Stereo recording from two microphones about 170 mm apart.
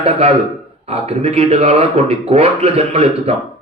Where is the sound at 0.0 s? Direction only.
35° right (ahead or behind).